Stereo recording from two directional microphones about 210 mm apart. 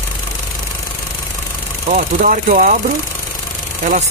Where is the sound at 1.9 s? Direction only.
40° right (ahead or behind).